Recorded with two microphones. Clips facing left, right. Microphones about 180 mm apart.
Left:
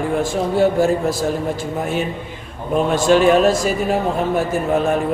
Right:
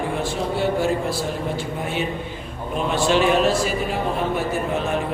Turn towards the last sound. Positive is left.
turn(degrees=45)  # may be behind; listen again after turning